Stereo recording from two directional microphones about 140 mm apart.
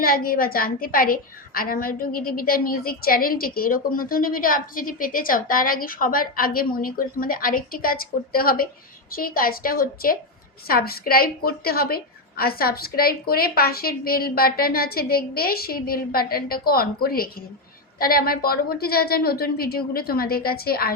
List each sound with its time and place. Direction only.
0.0 s a woman's voice: 90° left